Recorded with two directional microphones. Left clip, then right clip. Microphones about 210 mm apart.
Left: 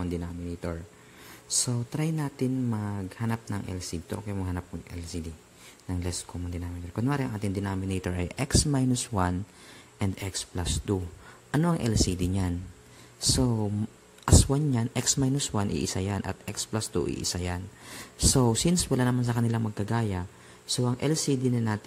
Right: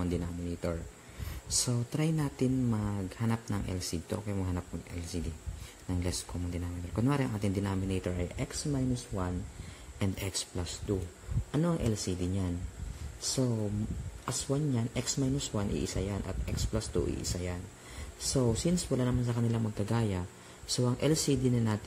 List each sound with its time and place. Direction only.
0.0 s speech: 10° left (ahead or behind); by 9.3 s 35° left (ahead or behind)
9.9 s speech: 15° left (ahead or behind)
14.2 s speech: 25° left (ahead or behind)